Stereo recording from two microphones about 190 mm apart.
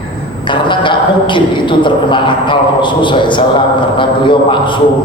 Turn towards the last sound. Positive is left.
turn(degrees=25)  # may be behind; listen again after turning